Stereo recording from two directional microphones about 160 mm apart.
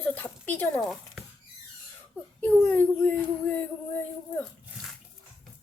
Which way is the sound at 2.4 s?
10° left (ahead or behind).